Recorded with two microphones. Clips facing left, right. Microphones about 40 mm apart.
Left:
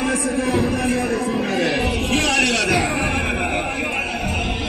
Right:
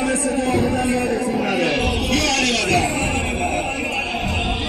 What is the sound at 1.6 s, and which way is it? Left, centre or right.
Music, centre.